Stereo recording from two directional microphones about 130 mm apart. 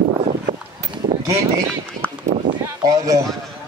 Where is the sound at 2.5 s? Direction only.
30° right (ahead or behind).